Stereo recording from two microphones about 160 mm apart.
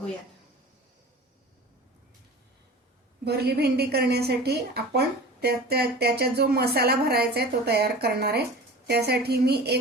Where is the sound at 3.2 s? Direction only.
85° right.